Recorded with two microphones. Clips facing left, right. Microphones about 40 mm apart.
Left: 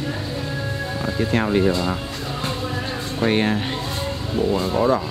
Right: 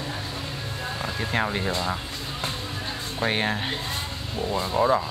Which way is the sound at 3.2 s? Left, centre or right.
Centre.